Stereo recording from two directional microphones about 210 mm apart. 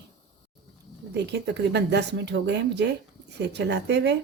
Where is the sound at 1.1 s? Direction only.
55° right (ahead or behind).